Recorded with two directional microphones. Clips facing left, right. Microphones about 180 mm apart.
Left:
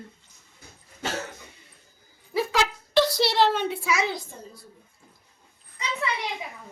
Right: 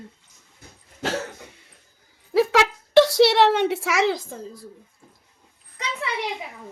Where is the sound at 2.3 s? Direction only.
70° right (ahead or behind); by 4.4 s 90° right.